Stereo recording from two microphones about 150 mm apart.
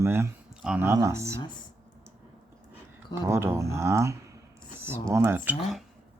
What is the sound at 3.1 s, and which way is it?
Speech, 15° right (ahead or behind).